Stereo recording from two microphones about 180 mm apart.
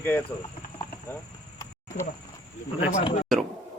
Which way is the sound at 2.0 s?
45° left (ahead or behind).